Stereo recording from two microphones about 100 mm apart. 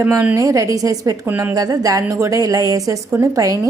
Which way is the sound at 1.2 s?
20° right (ahead or behind).